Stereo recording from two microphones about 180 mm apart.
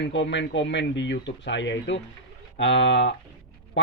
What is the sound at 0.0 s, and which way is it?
Speech, 90° left.